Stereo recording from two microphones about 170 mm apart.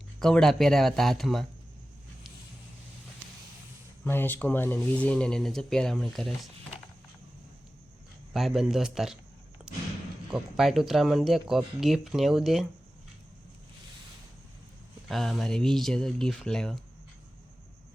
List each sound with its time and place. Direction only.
0.2 s speech: 5° left (ahead or behind)
4.0 s speech: 10° left (ahead or behind)
8.3 s speech: centre (ahead or behind)
10.3 s speech: centre (ahead or behind)
15.1 s speech: centre (ahead or behind)